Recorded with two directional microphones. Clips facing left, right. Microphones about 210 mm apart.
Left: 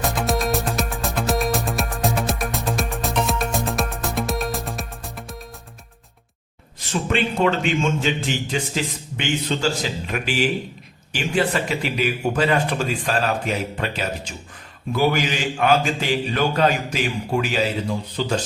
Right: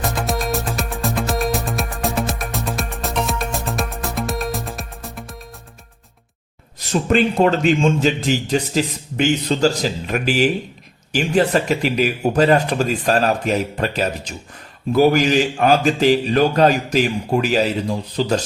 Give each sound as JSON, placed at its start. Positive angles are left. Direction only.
{"t": 0.0, "sound": "music", "side_deg": 0}
{"t": 6.7, "sound": "a man's voice", "side_deg": -40}